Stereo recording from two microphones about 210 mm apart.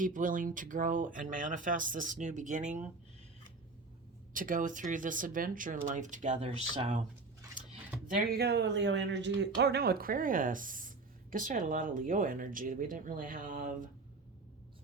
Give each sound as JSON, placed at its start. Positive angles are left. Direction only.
{"t": 0.0, "sound": "speech", "side_deg": -40}
{"t": 4.4, "sound": "speech", "side_deg": -40}
{"t": 8.0, "sound": "speech", "side_deg": -45}